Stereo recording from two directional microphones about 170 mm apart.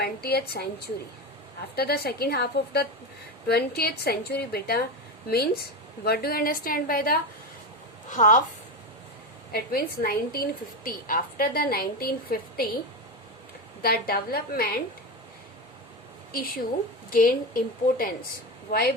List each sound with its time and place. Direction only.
0.0 s a woman's voice: 70° left (ahead or behind)
8.1 s a woman's voice: 50° left (ahead or behind)
9.5 s a woman's voice: 60° left (ahead or behind)
13.8 s a woman's voice: 60° left (ahead or behind)
17.1 s a woman's voice: 55° left (ahead or behind)